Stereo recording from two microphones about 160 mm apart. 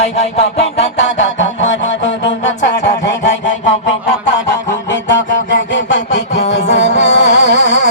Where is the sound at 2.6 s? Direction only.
90° left.